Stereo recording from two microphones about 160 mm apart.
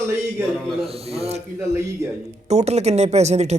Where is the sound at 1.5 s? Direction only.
15° right (ahead or behind).